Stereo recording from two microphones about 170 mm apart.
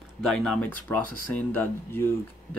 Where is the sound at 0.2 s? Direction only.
5° left (ahead or behind).